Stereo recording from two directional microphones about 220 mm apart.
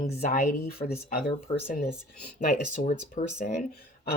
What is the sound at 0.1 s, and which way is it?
Speech, 35° left (ahead or behind).